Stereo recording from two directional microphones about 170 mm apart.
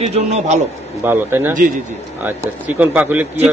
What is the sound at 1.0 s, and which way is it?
A man's voice, 10° right (ahead or behind).